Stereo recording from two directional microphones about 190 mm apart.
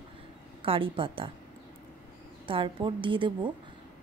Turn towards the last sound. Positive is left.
turn(degrees=-25)  # may be behind; listen again after turning